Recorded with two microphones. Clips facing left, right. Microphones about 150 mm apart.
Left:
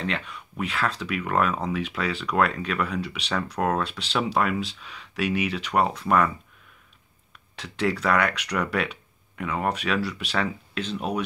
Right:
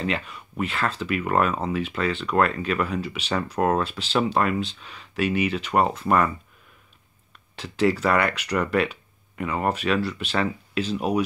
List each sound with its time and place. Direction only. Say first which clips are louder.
0.0 s speech: right 3 dB; 5° right (ahead or behind)
7.5 s speech: right 4 dB; centre (ahead or behind)